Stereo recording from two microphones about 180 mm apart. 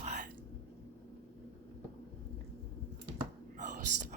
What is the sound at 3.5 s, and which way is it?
Whispering, 45° right (ahead or behind).